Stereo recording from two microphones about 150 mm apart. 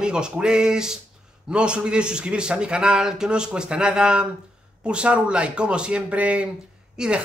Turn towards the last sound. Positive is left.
turn(degrees=-5)  # may be behind; listen again after turning